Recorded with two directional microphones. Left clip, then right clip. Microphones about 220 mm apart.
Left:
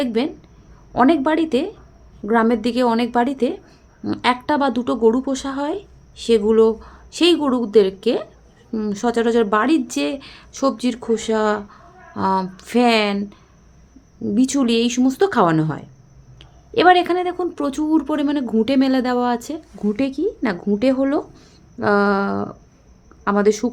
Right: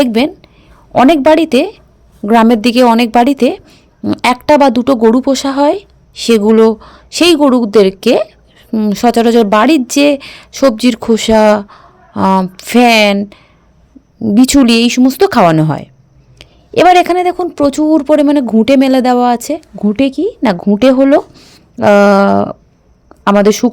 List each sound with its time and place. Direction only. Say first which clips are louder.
0.0 s a woman's voice: right 10 dB; 45° right (ahead or behind)